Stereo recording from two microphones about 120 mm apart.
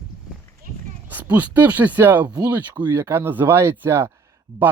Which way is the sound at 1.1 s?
15° right (ahead or behind).